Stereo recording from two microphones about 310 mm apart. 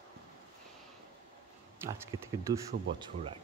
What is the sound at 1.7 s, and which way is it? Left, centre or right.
Speech, centre.